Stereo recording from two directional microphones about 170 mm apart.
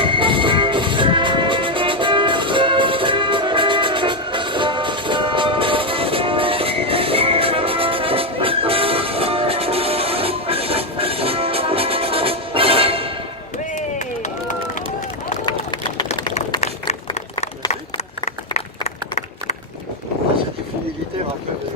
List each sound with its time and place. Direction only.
0.0 s music: 30° right (ahead or behind)
13.7 s run: 45° left (ahead or behind)